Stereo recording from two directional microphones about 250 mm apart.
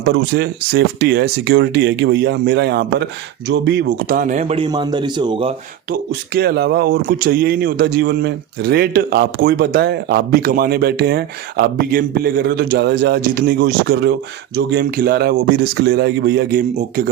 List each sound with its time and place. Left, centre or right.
0.0 s a man's voice: right
5.9 s speech: right